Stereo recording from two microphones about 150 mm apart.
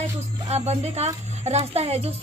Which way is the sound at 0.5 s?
45° right (ahead or behind).